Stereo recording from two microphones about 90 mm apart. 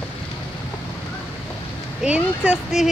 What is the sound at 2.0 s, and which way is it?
Speech, 10° right (ahead or behind).